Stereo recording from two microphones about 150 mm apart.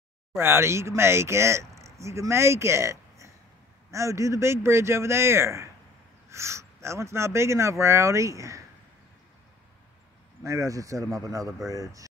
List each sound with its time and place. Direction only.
0.4 s speech: 15° right (ahead or behind)
10.4 s speech: 20° right (ahead or behind)